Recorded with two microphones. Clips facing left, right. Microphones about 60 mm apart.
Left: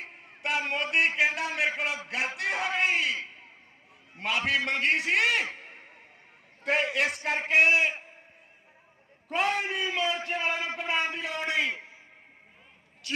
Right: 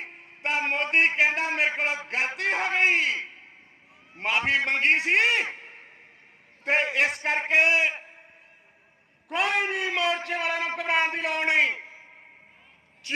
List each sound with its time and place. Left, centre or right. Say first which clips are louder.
0.0 s a man's voice: right 3 dB; right
4.2 s a man's voice: right 3 dB; right
9.3 s a man's voice: right 2 dB; right